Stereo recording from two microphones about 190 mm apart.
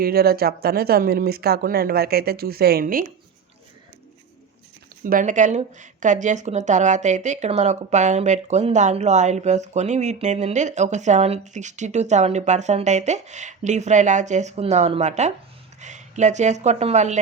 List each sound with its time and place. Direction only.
0.0 s speech: 55° right (ahead or behind)
5.0 s a woman's voice: 45° right (ahead or behind)